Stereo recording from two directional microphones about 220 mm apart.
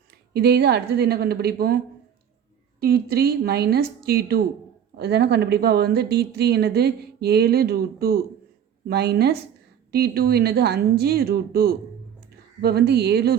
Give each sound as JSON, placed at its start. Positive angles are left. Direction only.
{"t": 0.3, "sound": "speech", "side_deg": -45}
{"t": 2.8, "sound": "speech", "side_deg": -45}